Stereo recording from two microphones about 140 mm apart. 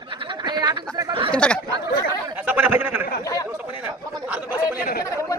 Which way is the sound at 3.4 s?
15° right (ahead or behind).